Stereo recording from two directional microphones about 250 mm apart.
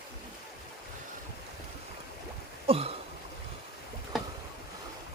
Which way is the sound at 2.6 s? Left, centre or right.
Right.